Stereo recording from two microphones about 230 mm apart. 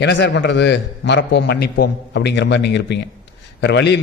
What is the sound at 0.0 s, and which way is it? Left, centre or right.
A man's voice, left.